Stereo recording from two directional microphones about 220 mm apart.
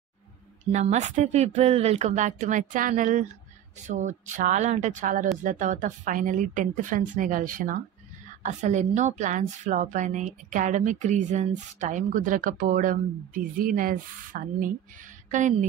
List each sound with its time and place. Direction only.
0.7 s a woman's voice: 30° right (ahead or behind)